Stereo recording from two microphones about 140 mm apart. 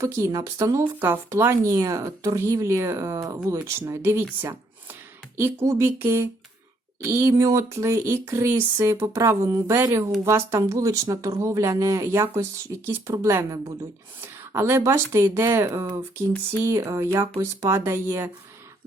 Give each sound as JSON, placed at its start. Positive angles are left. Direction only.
{"t": 0.0, "sound": "speech", "side_deg": -20}